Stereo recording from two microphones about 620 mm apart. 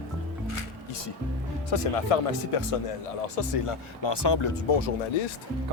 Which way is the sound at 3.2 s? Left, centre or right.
Left.